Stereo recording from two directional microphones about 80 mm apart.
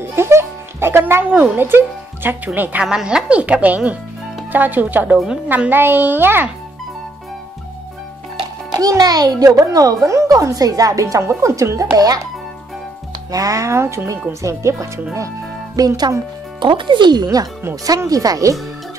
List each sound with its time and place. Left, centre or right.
0.0 s music: right
1.3 s a child's voice: centre
2.9 s a child's voice: centre; by 6.5 s right
8.7 s speech: right
13.3 s speech: right
15.8 s speech: right
16.5 s speech: right